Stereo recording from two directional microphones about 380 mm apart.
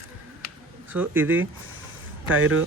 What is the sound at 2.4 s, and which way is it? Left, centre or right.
Speech, right.